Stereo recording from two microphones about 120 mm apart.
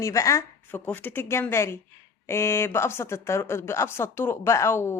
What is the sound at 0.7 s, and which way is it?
A woman's voice, 15° left (ahead or behind).